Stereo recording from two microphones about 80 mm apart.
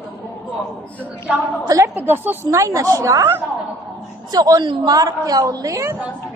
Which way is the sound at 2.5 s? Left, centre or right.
Right.